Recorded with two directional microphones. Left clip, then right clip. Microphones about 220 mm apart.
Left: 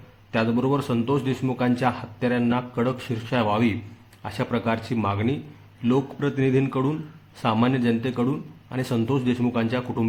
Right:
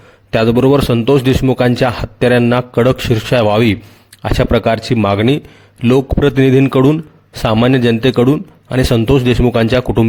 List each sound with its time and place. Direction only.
0.3 s a man's voice: 45° right (ahead or behind)